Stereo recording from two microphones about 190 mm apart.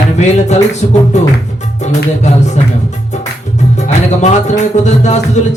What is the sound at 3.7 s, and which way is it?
Music, 35° left (ahead or behind).